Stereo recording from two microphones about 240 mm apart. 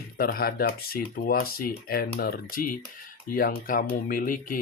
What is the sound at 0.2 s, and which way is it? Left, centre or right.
Speech, left.